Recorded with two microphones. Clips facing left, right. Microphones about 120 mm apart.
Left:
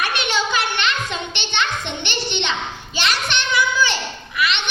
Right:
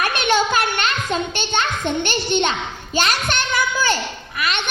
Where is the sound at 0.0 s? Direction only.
45° right (ahead or behind).